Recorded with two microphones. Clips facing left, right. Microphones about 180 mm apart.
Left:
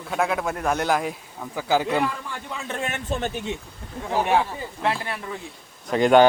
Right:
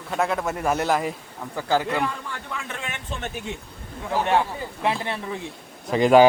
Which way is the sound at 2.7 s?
45° left (ahead or behind).